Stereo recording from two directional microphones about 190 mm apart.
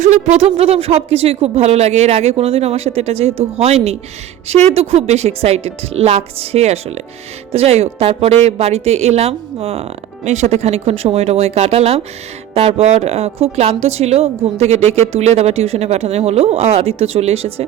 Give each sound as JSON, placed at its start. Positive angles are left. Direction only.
{"t": 0.0, "sound": "speech", "side_deg": -35}